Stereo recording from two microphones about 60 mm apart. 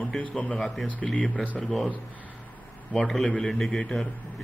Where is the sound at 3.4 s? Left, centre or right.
Centre.